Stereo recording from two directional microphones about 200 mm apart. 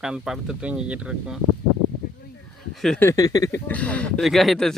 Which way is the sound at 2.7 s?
5° left (ahead or behind).